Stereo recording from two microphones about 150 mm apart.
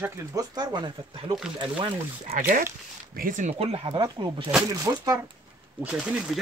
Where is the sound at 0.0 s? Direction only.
20° right (ahead or behind).